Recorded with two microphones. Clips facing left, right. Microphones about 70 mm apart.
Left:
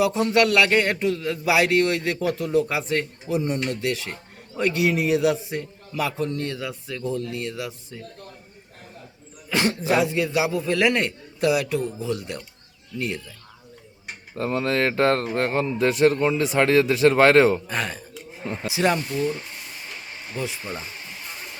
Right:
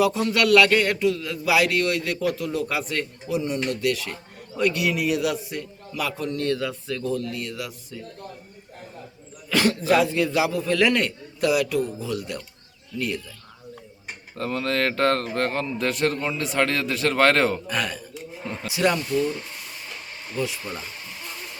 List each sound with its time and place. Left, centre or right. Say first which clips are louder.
0.0 s speech: left 2 dB; left
9.5 s speech: right 2 dB; left
14.3 s speech: left 2 dB; centre